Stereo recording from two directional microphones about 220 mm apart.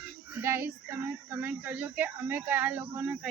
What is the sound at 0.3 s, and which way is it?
Speech, 10° right (ahead or behind).